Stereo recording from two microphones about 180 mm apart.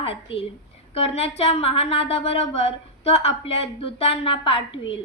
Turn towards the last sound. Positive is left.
turn(degrees=30)  # may be behind; listen again after turning